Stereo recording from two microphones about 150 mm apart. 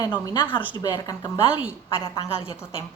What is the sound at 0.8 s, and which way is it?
Speech, 25° left (ahead or behind).